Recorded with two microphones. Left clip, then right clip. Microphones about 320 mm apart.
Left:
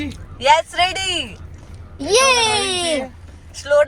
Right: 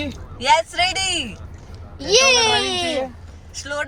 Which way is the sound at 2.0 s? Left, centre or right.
Centre.